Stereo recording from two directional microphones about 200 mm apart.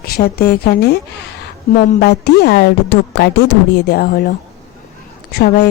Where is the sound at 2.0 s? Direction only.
55° left (ahead or behind).